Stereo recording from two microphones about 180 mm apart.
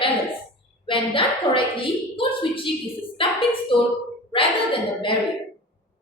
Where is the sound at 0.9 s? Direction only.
30° left (ahead or behind).